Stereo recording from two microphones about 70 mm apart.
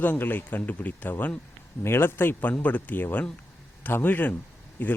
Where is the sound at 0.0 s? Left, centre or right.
Left.